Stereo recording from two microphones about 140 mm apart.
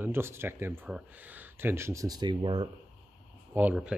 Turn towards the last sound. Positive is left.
turn(degrees=-15)  # may be behind; listen again after turning